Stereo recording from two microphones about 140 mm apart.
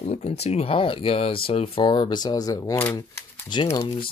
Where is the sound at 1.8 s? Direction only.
30° left (ahead or behind).